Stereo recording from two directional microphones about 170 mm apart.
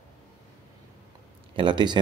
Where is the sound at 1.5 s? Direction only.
25° right (ahead or behind).